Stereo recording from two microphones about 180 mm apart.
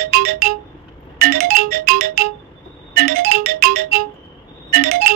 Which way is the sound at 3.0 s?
55° right (ahead or behind).